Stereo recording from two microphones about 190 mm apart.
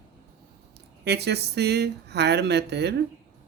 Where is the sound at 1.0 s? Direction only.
60° right (ahead or behind).